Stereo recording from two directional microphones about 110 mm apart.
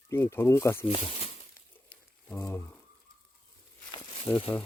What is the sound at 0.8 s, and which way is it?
Speech, 55° left (ahead or behind).